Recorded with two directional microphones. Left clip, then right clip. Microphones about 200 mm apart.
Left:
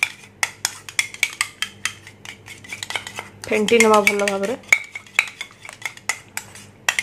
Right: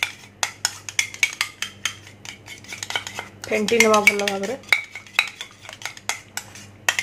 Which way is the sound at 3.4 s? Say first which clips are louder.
Left 2 dB; 20° left (ahead or behind).